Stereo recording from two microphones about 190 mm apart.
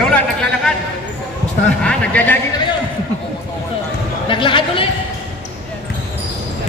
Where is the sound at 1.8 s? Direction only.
5° left (ahead or behind).